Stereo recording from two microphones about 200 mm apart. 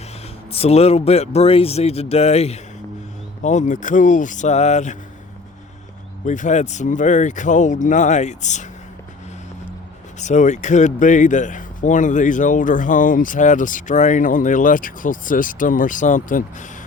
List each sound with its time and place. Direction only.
0.5 s speech: 30° left (ahead or behind)
6.2 s speech: 40° left (ahead or behind)
10.2 s speech: 35° left (ahead or behind)